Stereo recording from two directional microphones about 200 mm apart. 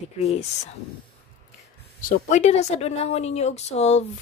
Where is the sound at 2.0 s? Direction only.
40° left (ahead or behind).